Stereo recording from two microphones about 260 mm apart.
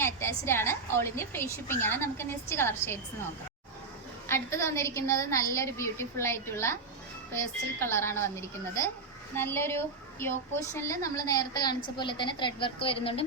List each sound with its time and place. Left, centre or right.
0.0 s a woman's voice: centre
4.3 s a woman's voice: centre
7.8 s a woman's voice: centre